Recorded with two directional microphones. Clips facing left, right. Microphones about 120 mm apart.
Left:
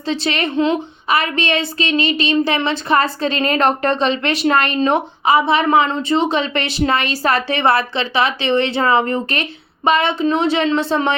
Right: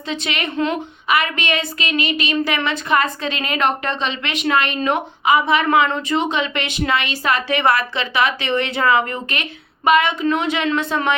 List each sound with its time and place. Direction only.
0.1 s a woman's voice: 35° left (ahead or behind)
0.5 s a woman's voice: 25° left (ahead or behind)
1.1 s a woman's voice: 35° left (ahead or behind)